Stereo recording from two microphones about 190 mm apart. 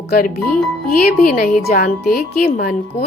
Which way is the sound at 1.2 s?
50° left (ahead or behind).